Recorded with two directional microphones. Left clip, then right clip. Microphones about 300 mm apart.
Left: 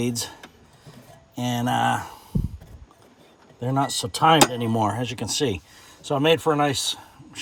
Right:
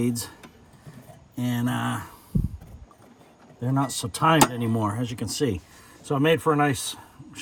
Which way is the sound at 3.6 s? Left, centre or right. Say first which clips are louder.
Left 3 dB; centre.